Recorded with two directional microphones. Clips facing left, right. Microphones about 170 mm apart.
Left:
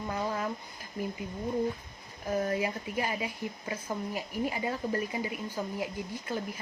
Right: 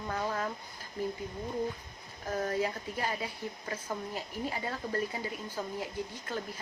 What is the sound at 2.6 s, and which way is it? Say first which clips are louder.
Speech: left 1 dB; 10° left (ahead or behind).